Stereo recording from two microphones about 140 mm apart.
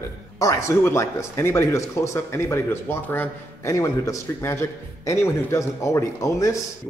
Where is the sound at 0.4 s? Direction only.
20° left (ahead or behind).